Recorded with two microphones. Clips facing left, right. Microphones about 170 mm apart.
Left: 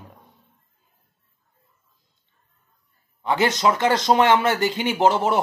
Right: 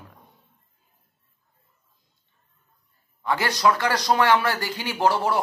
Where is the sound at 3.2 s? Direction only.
20° left (ahead or behind).